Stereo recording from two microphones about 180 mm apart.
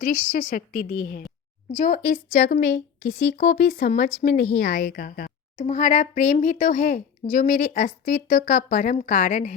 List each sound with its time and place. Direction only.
0.0 s a woman's voice: 45° left (ahead or behind)
1.7 s a woman's voice: 45° left (ahead or behind)